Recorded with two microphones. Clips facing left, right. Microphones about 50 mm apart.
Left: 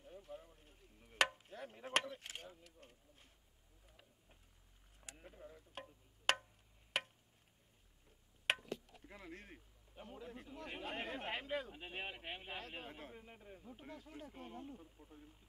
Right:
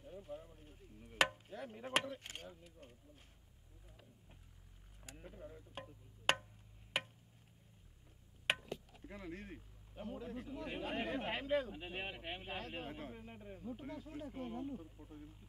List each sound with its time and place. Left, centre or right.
0.0 s a sound: centre
5.1 s speech: centre
8.5 s speech: centre